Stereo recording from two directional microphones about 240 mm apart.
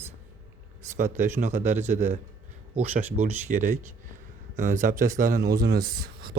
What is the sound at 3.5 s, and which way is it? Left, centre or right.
A man's voice, right.